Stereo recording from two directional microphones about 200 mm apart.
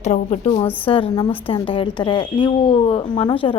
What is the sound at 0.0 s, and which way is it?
Speech, 35° left (ahead or behind).